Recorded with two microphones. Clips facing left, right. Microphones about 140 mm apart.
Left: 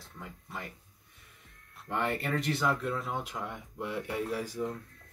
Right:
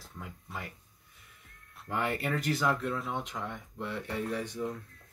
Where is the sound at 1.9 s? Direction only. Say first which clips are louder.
Even; centre (ahead or behind).